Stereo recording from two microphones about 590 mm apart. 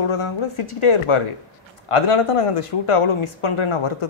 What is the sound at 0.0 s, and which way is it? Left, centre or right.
Speech, left.